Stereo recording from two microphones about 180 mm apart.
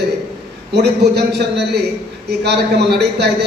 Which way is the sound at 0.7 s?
65° right (ahead or behind).